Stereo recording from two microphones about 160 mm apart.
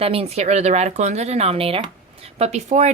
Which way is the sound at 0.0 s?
40° right (ahead or behind).